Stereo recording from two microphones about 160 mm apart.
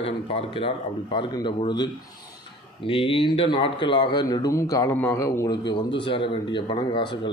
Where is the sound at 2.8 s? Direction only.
35° left (ahead or behind); by 5.6 s 20° left (ahead or behind).